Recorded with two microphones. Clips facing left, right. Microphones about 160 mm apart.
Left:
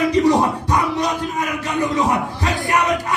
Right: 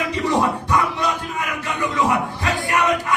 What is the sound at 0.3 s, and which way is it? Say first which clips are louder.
Music: left 3 dB; 40° left (ahead or behind).